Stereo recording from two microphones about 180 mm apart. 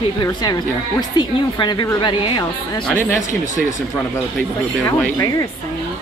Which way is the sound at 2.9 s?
10° left (ahead or behind).